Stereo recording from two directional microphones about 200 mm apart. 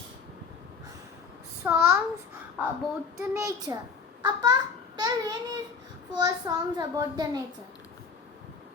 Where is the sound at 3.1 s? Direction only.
15° right (ahead or behind).